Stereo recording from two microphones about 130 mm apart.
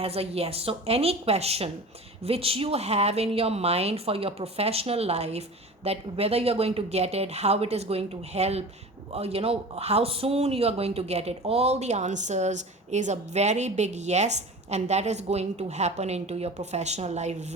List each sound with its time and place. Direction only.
0.0 s a woman's voice: 50° right (ahead or behind)